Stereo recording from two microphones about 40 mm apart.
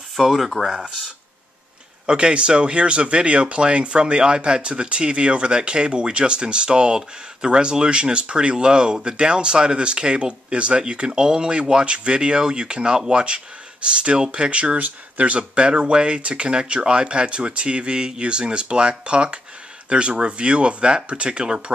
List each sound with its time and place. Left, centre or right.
0.1 s speech: centre
2.0 s speech: right